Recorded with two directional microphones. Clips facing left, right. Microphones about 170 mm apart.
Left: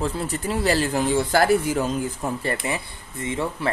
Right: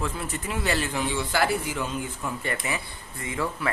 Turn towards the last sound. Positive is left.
turn(degrees=25)  # may be behind; listen again after turning